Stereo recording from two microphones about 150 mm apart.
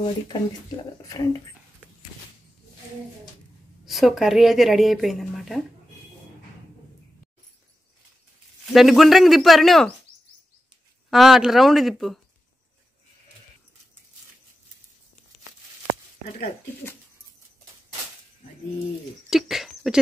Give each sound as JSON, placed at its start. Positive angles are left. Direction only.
{"t": 0.0, "sound": "speech", "side_deg": 30}
{"t": 3.8, "sound": "a woman's voice", "side_deg": 0}
{"t": 8.7, "sound": "a woman's voice", "side_deg": 0}
{"t": 11.1, "sound": "a woman's voice", "side_deg": 0}
{"t": 19.2, "sound": "a sound", "side_deg": 0}